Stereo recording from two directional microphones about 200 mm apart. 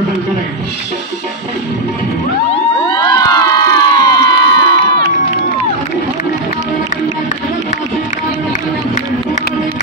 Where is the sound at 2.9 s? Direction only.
20° left (ahead or behind).